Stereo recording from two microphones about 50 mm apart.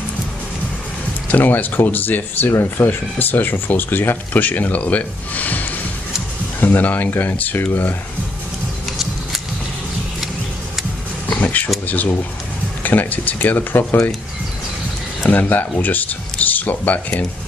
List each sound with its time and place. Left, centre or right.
1.3 s speech: left
11.2 s a sound: left
12.8 s speech: left
15.2 s speech: left